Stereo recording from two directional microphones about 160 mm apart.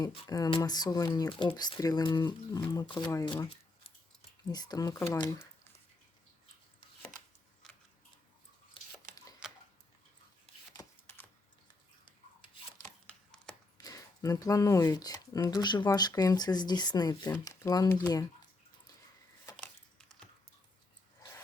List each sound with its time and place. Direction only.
0.3 s speech: 25° left (ahead or behind)
4.4 s speech: 25° left (ahead or behind)
7.6 s biting: 5° left (ahead or behind)
9.4 s tick-tock: 5° right (ahead or behind)
10.8 s shuffling cards: 10° left (ahead or behind)
13.1 s a sound: 5° left (ahead or behind)
13.7 s speech: 20° left (ahead or behind)